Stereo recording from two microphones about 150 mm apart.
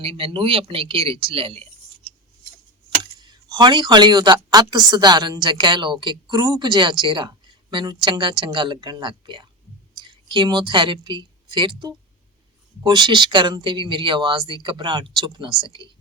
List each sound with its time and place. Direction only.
0.0 s a woman's voice: 40° right (ahead or behind)
3.0 s a sound: 30° right (ahead or behind)
4.5 s a woman's voice: 30° right (ahead or behind)